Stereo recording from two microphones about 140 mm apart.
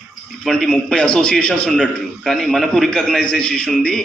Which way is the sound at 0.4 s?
5° left (ahead or behind).